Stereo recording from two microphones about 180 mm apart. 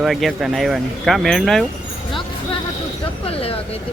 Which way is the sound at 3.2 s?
30° left (ahead or behind).